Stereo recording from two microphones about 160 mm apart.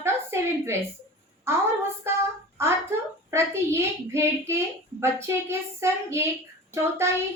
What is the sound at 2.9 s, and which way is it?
A child's voice, 15° right (ahead or behind).